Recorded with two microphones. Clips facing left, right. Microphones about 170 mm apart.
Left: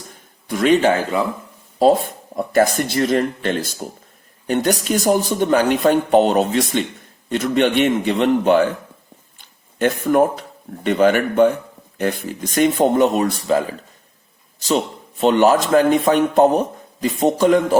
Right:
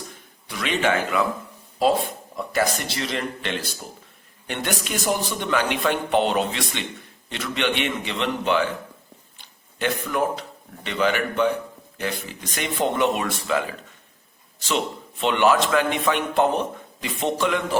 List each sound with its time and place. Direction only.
0.1 s speech: 45° left (ahead or behind)
1.8 s speech: 45° left (ahead or behind)
9.4 s a sound: 45° left (ahead or behind)
10.8 s speech: 45° left (ahead or behind)
15.2 s a man's voice: 40° left (ahead or behind)